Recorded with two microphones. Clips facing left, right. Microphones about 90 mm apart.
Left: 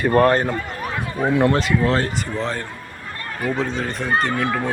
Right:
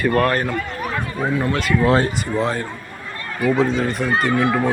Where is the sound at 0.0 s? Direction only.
25° left (ahead or behind).